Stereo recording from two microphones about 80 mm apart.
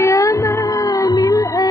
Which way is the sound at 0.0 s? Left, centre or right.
Left.